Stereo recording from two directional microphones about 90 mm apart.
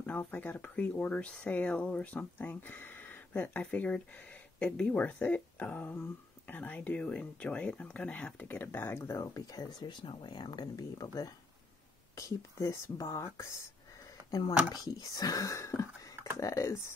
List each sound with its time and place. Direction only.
0.3 s speech: 20° left (ahead or behind)
14.7 s speech: 40° left (ahead or behind)